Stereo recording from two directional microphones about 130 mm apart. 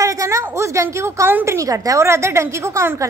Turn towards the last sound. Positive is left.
turn(degrees=-20)  # may be behind; listen again after turning